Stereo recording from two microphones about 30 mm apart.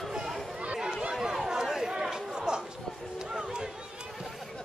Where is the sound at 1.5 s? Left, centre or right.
Right.